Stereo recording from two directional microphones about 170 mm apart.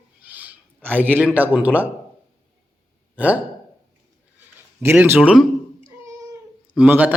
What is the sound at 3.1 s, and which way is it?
Speech, 10° right (ahead or behind).